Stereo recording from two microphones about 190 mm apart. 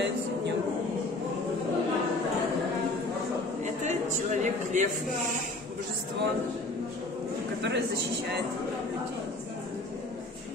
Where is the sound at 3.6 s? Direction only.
40° right (ahead or behind).